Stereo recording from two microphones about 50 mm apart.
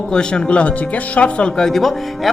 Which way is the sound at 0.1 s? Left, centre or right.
Centre.